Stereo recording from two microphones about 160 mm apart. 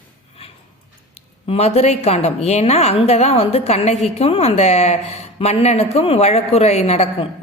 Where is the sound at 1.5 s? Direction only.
40° left (ahead or behind).